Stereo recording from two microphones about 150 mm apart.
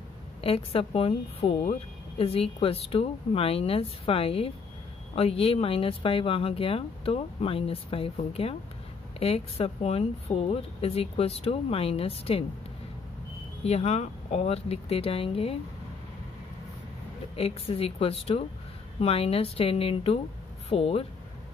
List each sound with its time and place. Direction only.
0.4 s a woman's voice: 40° left (ahead or behind)
13.7 s speech: 45° left (ahead or behind)
17.4 s a woman's voice: 40° left (ahead or behind)